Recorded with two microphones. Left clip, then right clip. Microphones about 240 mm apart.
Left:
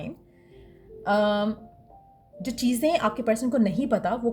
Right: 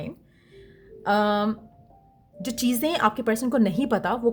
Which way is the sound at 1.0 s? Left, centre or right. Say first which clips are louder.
Right 1 dB; right.